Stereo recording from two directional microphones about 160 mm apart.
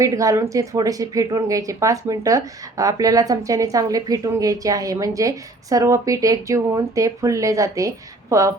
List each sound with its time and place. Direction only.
0.0 s speech: 20° right (ahead or behind)